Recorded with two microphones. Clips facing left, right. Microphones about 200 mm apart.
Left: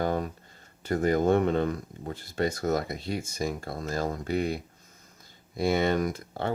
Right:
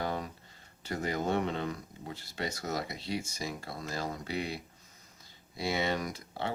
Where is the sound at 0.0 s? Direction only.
50° left (ahead or behind).